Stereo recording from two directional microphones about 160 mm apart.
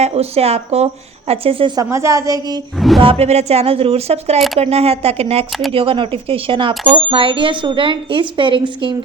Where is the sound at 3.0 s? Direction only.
35° right (ahead or behind).